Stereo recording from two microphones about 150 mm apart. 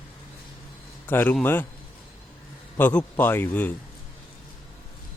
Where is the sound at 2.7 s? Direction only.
15° left (ahead or behind).